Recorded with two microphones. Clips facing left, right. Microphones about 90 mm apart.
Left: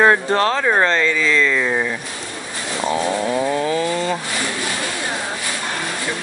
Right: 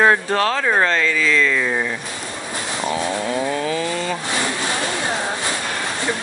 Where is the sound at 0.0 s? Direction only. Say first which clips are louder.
Left 1 dB; centre (ahead or behind).